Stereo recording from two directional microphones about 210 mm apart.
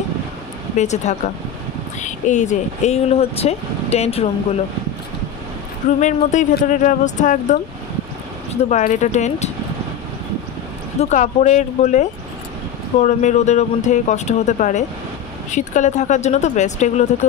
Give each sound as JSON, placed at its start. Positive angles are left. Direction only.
{"t": 0.7, "sound": "speech", "side_deg": 35}
{"t": 5.9, "sound": "speech", "side_deg": 35}
{"t": 8.6, "sound": "speech", "side_deg": 35}
{"t": 11.0, "sound": "speech", "side_deg": 35}